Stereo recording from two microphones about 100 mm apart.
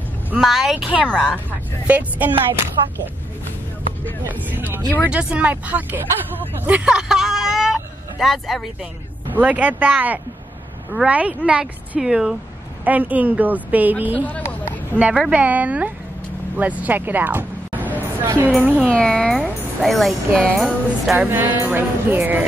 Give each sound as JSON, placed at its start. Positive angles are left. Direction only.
{"t": 0.4, "sound": "speech", "side_deg": 0}
{"t": 1.9, "sound": "a woman's voice", "side_deg": -15}
{"t": 4.3, "sound": "speech", "side_deg": -20}
{"t": 4.8, "sound": "speech", "side_deg": 20}
{"t": 5.1, "sound": "a woman's voice", "side_deg": -15}
{"t": 6.6, "sound": "vehicle", "side_deg": -15}
{"t": 9.3, "sound": "a woman's voice", "side_deg": -15}
{"t": 14.4, "sound": "hubbub", "side_deg": 20}
{"t": 15.0, "sound": "a woman's voice", "side_deg": -10}
{"t": 18.0, "sound": "a sound", "side_deg": -20}
{"t": 18.9, "sound": "speech", "side_deg": 10}
{"t": 21.3, "sound": "speech", "side_deg": -20}